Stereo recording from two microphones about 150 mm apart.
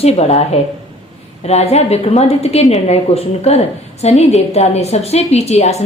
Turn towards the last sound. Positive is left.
turn(degrees=45)  # may be behind; listen again after turning